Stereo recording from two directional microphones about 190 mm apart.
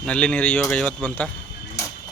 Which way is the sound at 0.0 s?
5° left (ahead or behind).